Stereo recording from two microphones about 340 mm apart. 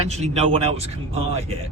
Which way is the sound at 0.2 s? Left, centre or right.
Centre.